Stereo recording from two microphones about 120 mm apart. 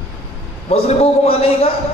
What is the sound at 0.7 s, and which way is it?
A man's voice, 55° left (ahead or behind).